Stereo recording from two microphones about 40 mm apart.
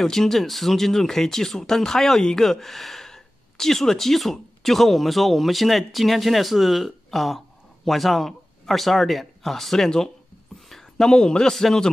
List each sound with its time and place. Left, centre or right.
0.0 s speech: centre
10.7 s a sound: centre
11.5 s a man's voice: centre